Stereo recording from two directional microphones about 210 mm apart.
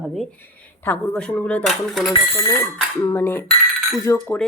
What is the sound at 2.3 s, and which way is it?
Cutlery, 15° left (ahead or behind).